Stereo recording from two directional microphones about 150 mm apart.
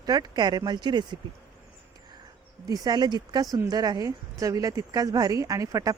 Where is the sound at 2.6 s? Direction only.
25° right (ahead or behind).